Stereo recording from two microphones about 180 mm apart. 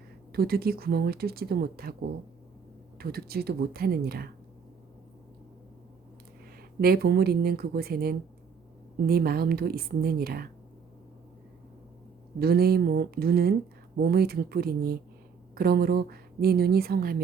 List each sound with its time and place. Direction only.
0.3 s a woman's voice: 60° right (ahead or behind)
3.0 s a woman's voice: 60° right (ahead or behind)
6.8 s a woman's voice: 60° right (ahead or behind)
12.4 s a woman's voice: 60° right (ahead or behind)